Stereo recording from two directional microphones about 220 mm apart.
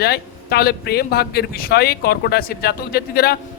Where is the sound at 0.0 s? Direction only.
45° left (ahead or behind).